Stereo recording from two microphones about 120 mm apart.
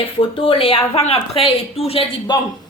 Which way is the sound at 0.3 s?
50° left (ahead or behind).